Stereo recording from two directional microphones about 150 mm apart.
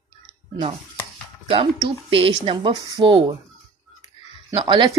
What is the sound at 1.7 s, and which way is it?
Speech, 25° right (ahead or behind).